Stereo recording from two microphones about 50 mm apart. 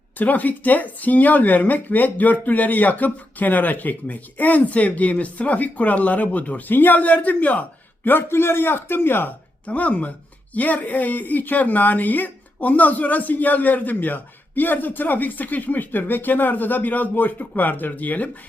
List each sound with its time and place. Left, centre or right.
0.2 s speech: left
8.0 s a man's voice: left
9.6 s speech: left